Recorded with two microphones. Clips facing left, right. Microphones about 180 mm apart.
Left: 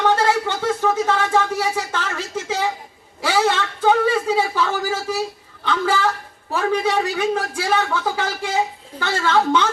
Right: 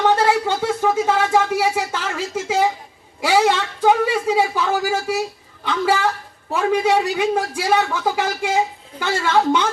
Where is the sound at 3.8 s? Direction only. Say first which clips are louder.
Even; 10° right (ahead or behind).